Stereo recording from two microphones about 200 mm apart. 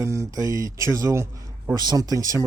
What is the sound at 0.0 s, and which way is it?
Speech, 15° right (ahead or behind).